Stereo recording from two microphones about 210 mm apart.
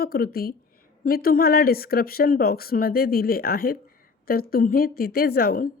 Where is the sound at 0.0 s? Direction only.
45° left (ahead or behind).